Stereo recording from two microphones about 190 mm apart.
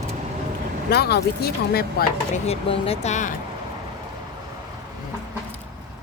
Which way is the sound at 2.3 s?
30° left (ahead or behind).